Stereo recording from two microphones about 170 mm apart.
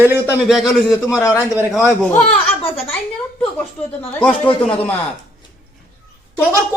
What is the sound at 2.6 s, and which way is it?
Speech, 35° left (ahead or behind).